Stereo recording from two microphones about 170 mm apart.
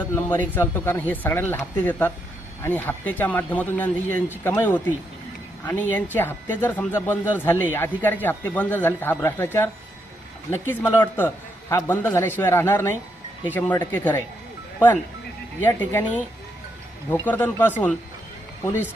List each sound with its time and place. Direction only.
0.1 s speech: 10° left (ahead or behind)
15.6 s speech: 10° left (ahead or behind)